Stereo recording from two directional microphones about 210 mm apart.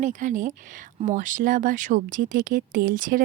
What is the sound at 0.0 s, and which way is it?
A woman's voice, 35° right (ahead or behind).